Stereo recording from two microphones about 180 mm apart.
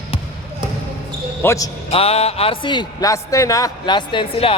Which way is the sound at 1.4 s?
15° left (ahead or behind).